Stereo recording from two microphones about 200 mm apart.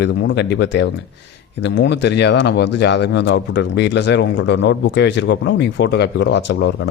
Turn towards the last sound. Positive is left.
turn(degrees=65)  # may be behind; listen again after turning